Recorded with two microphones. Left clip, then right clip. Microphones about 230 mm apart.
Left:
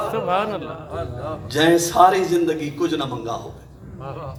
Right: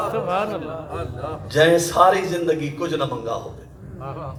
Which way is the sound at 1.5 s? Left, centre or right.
Left.